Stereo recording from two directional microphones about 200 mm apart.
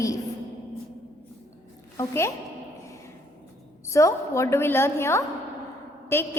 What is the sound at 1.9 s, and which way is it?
Speech, 15° left (ahead or behind).